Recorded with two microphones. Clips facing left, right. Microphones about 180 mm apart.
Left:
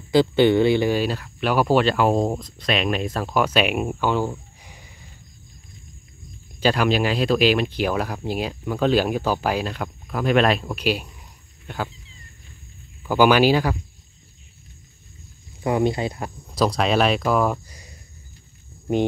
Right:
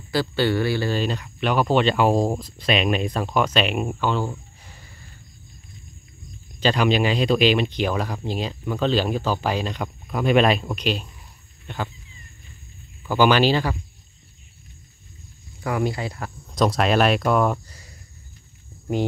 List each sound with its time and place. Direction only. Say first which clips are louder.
0.1 s speech: left 6 dB; 20° left (ahead or behind)
6.6 s a man's voice: even; 5° left (ahead or behind)
13.0 s speech: left 2 dB; 10° left (ahead or behind)
15.6 s speech: left 4 dB; 25° left (ahead or behind)
16.4 s speech: right 1 dB; centre (ahead or behind)